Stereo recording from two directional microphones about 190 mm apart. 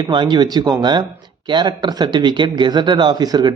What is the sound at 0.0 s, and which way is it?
Speech, 25° right (ahead or behind).